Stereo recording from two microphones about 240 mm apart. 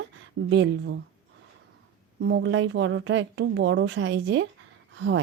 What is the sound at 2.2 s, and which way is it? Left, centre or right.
Speech, right.